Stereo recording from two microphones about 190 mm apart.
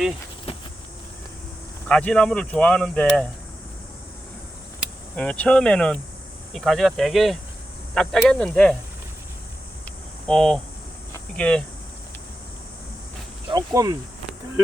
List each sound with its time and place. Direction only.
0.5 s insect: 30° left (ahead or behind)
1.9 s speech: 5° left (ahead or behind)
5.1 s speech: 5° left (ahead or behind)
9.8 s a sound: 5° left (ahead or behind)
11.1 s speech: 5° left (ahead or behind)
13.5 s cricket: 20° right (ahead or behind)